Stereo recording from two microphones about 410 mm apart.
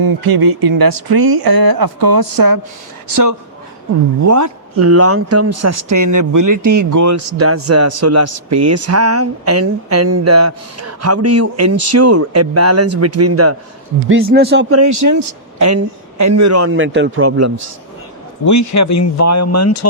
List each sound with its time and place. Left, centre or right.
0.0 s speech: right
4.2 s speech: right
14.1 s speech: right
18.4 s speech: left